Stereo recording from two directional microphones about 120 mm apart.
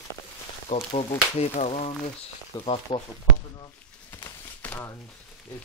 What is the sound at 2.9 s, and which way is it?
Speech, 40° left (ahead or behind).